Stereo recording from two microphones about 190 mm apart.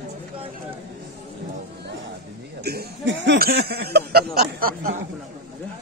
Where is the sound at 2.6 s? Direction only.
65° right (ahead or behind).